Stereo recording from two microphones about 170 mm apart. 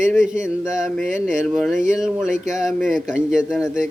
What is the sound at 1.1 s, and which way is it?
Speech, 50° right (ahead or behind).